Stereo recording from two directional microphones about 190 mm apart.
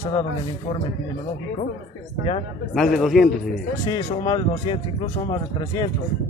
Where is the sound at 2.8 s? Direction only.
Centre (ahead or behind).